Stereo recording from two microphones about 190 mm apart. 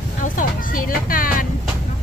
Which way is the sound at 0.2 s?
45° left (ahead or behind).